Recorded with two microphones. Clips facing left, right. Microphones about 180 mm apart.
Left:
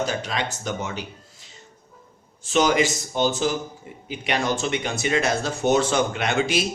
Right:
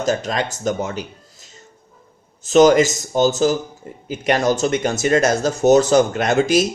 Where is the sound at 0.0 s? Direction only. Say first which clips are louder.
Right 5 dB; 45° right (ahead or behind).